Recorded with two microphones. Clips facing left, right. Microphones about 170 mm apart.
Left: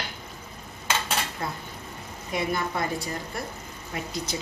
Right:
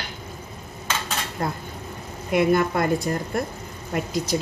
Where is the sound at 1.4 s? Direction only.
45° right (ahead or behind).